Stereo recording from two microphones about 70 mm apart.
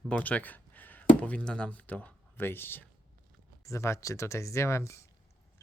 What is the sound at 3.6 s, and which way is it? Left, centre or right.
Speech, left.